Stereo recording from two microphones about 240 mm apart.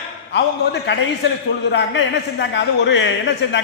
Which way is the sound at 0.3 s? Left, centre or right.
Left.